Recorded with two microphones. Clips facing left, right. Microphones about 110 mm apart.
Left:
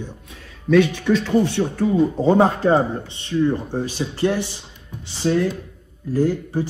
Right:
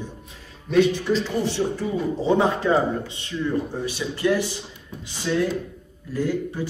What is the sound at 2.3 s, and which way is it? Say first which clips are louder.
Speech: left 3 dB; 45° left (ahead or behind).